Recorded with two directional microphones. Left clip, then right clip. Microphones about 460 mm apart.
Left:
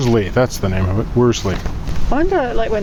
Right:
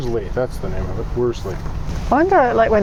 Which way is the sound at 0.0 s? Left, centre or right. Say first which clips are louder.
Left 6 dB; left.